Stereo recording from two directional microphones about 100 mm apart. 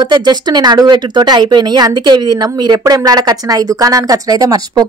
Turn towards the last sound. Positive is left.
turn(degrees=-40)  # may be behind; listen again after turning